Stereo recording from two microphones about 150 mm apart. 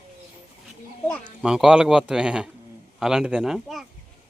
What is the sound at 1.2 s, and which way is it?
Speech, 5° right (ahead or behind).